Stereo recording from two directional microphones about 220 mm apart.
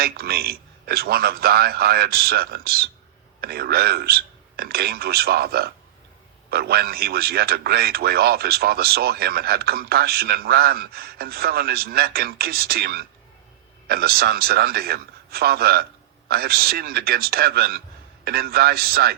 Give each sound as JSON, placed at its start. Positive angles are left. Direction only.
{"t": 0.0, "sound": "a man's voice", "side_deg": -45}